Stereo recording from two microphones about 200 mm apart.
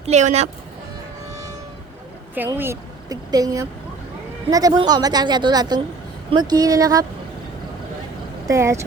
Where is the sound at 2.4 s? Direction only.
10° right (ahead or behind).